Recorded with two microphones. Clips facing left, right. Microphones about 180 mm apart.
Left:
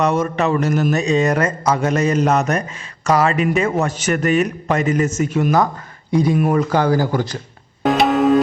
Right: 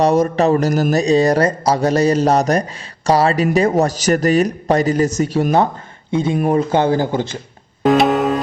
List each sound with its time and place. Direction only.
0.0 s speech: 35° right (ahead or behind)
7.9 s music: centre (ahead or behind)